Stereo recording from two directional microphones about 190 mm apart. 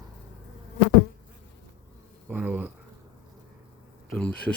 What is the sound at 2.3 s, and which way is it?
Insect, 10° right (ahead or behind).